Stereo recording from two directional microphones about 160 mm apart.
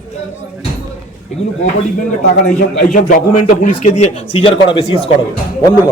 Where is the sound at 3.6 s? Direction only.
50° left (ahead or behind).